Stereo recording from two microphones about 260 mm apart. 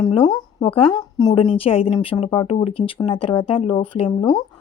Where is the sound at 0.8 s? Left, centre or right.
Centre.